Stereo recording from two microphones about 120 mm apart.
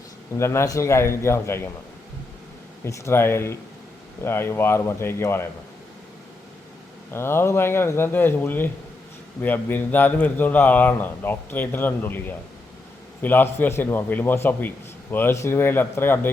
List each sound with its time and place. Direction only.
0.3 s a man's voice: 25° left (ahead or behind)
2.8 s a man's voice: 25° left (ahead or behind)
7.1 s a man's voice: 20° left (ahead or behind)
13.2 s speech: 15° left (ahead or behind)